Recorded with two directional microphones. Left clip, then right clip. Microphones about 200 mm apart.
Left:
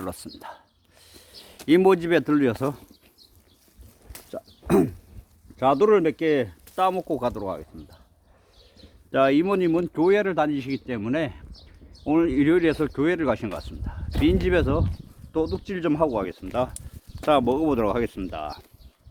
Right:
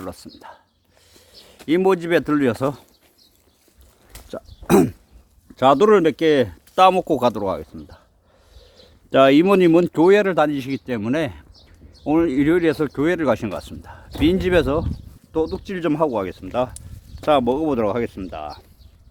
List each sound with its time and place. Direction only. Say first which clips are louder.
0.0 s speech: even; 5° left (ahead or behind); by 2.8 s 15° right (ahead or behind)
4.3 s speech: right 5 dB; 30° right (ahead or behind)
5.5 s speech: right 5 dB; 50° right (ahead or behind)
9.0 s speech: right 7 dB; 50° right (ahead or behind)
17.2 s speech: right 3 dB; 25° right (ahead or behind)